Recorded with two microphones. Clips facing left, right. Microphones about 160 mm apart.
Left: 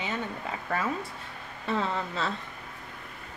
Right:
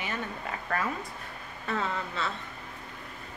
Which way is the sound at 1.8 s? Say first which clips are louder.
Left 2 dB; 35° left (ahead or behind).